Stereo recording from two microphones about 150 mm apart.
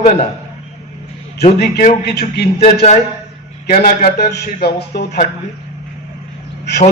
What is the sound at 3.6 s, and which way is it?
Speech, 80° left.